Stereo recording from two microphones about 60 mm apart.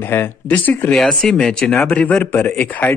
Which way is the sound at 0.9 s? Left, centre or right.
Centre.